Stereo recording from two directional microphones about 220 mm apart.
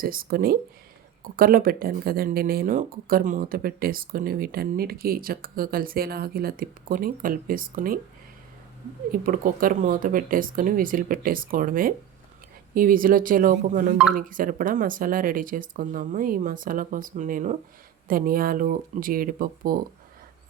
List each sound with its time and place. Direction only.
0.0 s speech: 40° right (ahead or behind)
9.1 s speech: 40° right (ahead or behind)